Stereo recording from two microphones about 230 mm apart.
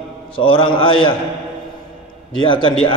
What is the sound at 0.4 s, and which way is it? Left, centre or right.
Speech, left.